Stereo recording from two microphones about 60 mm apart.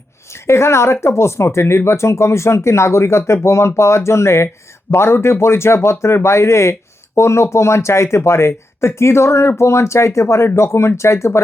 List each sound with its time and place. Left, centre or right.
0.3 s a woman's voice: left